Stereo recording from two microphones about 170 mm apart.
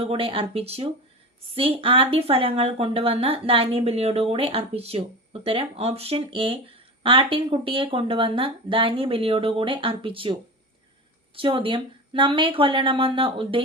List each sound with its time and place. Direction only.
0.0 s speech: 35° right (ahead or behind)
11.3 s speech: 30° right (ahead or behind)